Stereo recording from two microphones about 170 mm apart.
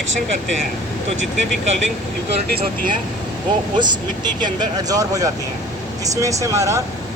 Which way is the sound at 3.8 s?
25° right (ahead or behind).